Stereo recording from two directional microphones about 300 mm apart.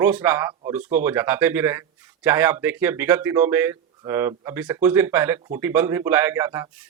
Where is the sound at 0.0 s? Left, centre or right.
Centre.